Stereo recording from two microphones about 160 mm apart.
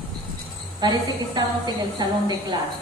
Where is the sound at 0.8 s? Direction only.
30° right (ahead or behind).